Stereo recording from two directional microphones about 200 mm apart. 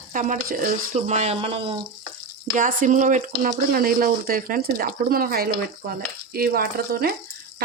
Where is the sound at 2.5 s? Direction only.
40° right (ahead or behind).